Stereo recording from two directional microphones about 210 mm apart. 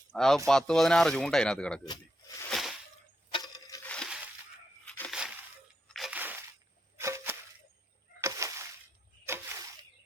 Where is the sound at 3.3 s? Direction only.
20° left (ahead or behind).